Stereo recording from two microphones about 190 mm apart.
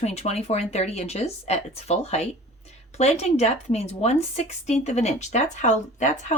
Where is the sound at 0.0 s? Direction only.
35° left (ahead or behind).